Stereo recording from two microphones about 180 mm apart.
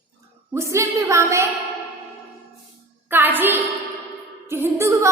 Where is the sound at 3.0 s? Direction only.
10° right (ahead or behind).